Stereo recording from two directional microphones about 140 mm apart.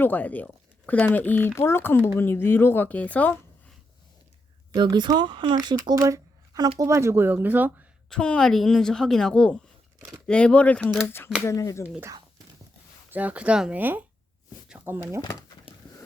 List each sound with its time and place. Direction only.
0.0 s speech: 10° left (ahead or behind)
4.7 s speech: 30° right (ahead or behind); by 7.9 s 15° right (ahead or behind)
8.1 s a woman's voice: 5° left (ahead or behind); by 11.9 s 20° left (ahead or behind)
13.1 s speech: 10° right (ahead or behind)